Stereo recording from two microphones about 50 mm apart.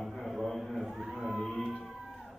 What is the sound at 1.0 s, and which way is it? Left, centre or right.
Music, centre.